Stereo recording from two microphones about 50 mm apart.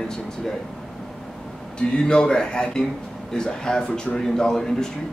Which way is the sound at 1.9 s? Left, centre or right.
Centre.